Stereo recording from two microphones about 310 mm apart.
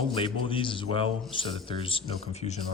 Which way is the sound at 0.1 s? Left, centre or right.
Centre.